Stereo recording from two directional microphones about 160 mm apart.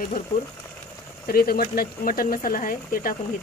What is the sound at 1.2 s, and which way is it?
Speech, 70° left (ahead or behind).